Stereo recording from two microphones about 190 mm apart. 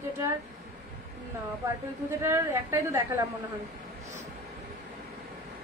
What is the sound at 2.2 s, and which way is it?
Speech, 15° right (ahead or behind).